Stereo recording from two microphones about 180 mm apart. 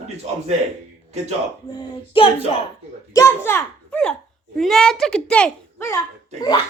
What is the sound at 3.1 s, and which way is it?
A child's voice, 15° left (ahead or behind).